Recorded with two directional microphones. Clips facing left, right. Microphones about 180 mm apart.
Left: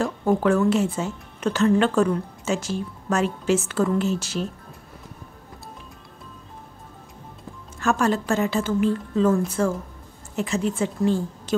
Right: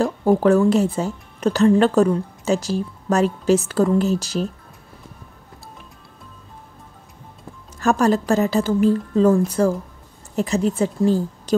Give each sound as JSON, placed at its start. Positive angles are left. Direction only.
{"t": 0.0, "sound": "a woman's voice", "side_deg": -35}
{"t": 7.8, "sound": "a woman's voice", "side_deg": -35}